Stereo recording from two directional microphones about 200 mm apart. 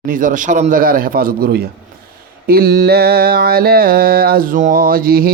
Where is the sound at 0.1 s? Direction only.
40° right (ahead or behind).